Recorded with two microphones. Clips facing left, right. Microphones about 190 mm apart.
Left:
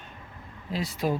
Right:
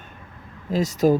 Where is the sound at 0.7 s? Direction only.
45° right (ahead or behind).